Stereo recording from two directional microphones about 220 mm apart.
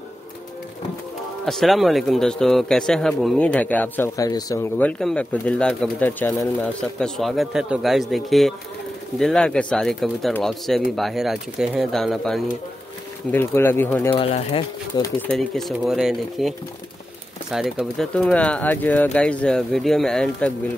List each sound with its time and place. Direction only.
1.4 s a man's voice: centre (ahead or behind)
14.1 s speech: 25° left (ahead or behind)
15.1 s a man's voice: 5° left (ahead or behind)